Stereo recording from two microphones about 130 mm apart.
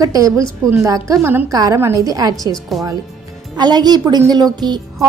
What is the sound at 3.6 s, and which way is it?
A woman's voice, 30° right (ahead or behind).